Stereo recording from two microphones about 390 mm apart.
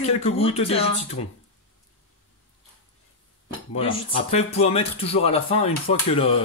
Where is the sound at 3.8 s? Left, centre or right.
Centre.